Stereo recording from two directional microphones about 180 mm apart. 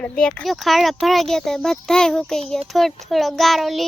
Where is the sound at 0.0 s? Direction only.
5° left (ahead or behind).